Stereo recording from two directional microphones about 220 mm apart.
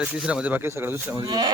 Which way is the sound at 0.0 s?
5° right (ahead or behind).